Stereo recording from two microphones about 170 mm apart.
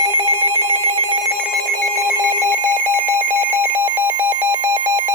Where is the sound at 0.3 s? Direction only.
15° right (ahead or behind).